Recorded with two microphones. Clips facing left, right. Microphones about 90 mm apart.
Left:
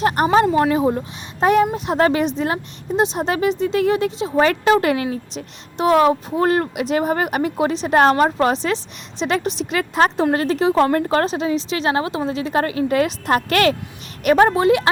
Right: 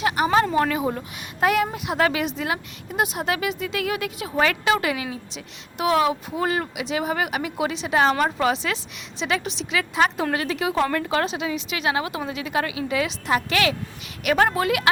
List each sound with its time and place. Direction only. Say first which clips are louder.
0.0 s a woman's voice: left 4 dB; 45° left (ahead or behind)
0.5 s a woman's voice: left 5 dB; 30° left (ahead or behind)
4.4 s a woman's voice: left 6 dB; 40° left (ahead or behind)
14.3 s a woman's voice: left 6 dB; 25° left (ahead or behind)